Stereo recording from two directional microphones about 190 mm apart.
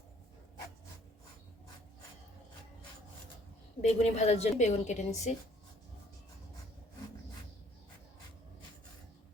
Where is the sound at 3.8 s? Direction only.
35° left (ahead or behind).